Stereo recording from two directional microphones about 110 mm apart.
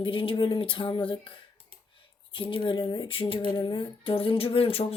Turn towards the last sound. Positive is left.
turn(degrees=60)  # may be behind; listen again after turning